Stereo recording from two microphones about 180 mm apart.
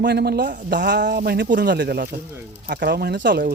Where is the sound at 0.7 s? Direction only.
70° right (ahead or behind).